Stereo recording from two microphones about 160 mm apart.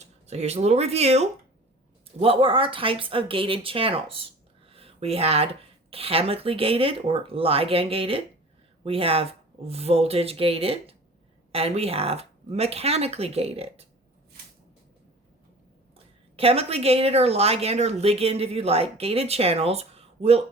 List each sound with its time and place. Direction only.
0.0 s a woman's voice: 45° right (ahead or behind)
16.3 s a woman's voice: 40° right (ahead or behind)